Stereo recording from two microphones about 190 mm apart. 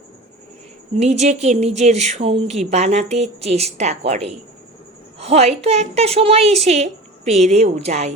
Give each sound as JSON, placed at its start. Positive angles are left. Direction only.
{"t": 0.9, "sound": "speech", "side_deg": -35}